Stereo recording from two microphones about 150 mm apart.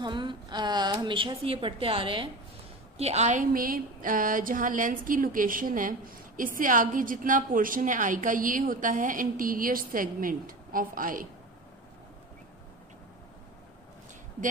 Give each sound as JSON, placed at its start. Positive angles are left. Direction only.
{"t": 0.0, "sound": "a woman's voice", "side_deg": -30}
{"t": 3.0, "sound": "a woman's voice", "side_deg": -45}